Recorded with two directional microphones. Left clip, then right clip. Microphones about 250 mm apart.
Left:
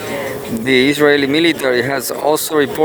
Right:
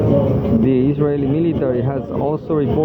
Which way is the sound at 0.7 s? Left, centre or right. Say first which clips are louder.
Left 10 dB; left.